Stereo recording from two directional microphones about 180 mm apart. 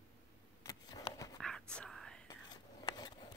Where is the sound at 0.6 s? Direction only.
20° left (ahead or behind).